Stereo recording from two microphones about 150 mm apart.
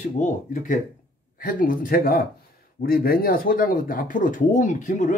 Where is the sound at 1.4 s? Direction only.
70° left (ahead or behind).